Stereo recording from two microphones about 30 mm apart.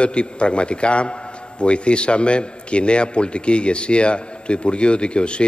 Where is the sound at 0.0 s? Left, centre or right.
Left.